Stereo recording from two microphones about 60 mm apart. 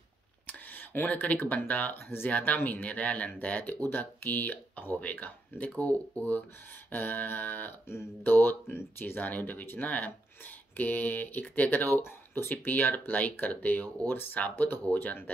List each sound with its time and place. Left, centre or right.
0.5 s speech: left